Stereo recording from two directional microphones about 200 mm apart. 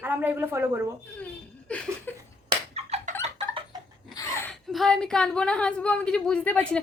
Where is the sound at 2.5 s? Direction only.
30° right (ahead or behind).